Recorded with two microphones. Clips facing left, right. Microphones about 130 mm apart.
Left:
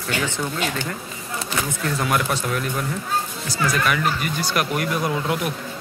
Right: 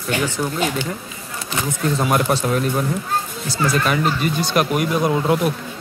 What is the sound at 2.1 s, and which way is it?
A man's voice, 35° right (ahead or behind).